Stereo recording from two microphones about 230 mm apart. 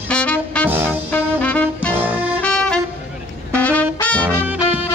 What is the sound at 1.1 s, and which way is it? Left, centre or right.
Music, centre.